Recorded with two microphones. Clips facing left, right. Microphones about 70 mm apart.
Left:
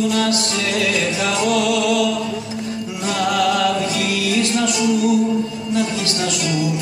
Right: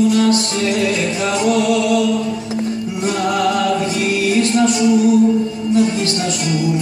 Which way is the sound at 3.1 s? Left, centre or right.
Right.